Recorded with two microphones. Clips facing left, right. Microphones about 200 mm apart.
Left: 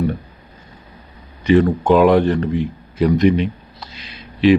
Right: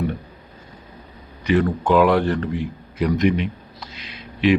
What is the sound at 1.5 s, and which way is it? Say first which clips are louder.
Speech: left 5 dB; 25° left (ahead or behind).